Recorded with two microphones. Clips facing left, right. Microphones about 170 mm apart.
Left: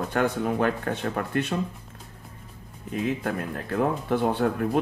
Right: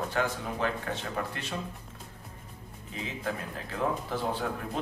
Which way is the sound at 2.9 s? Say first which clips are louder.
Left 8 dB; 60° left (ahead or behind).